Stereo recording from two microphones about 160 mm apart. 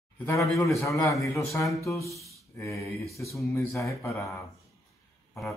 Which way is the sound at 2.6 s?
20° left (ahead or behind).